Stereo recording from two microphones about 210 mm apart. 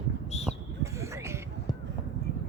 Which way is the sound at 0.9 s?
15° right (ahead or behind).